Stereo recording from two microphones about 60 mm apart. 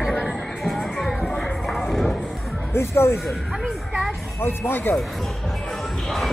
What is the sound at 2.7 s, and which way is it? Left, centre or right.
Speech, left.